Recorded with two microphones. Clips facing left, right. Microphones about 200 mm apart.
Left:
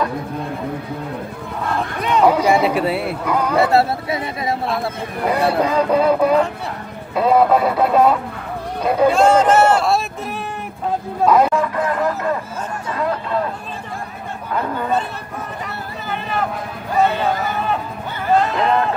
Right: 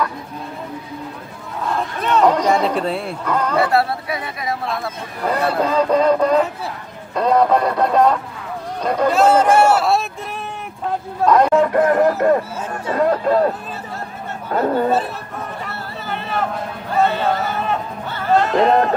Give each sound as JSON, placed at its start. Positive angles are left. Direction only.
{"t": 2.0, "sound": "speech", "side_deg": 10}
{"t": 3.6, "sound": "speech", "side_deg": 25}
{"t": 5.2, "sound": "speech", "side_deg": 10}
{"t": 9.2, "sound": "speech", "side_deg": -10}
{"t": 11.2, "sound": "speech", "side_deg": 5}
{"t": 11.6, "sound": "music", "side_deg": -45}
{"t": 12.9, "sound": "speech", "side_deg": -40}
{"t": 14.5, "sound": "speech", "side_deg": -40}
{"t": 15.6, "sound": "a sound", "side_deg": 0}
{"t": 17.0, "sound": "speech", "side_deg": 0}
{"t": 18.6, "sound": "speech", "side_deg": -40}